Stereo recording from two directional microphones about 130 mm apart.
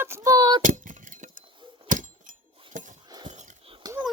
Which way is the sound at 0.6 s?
85° right.